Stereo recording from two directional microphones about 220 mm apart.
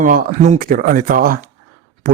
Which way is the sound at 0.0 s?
40° right (ahead or behind).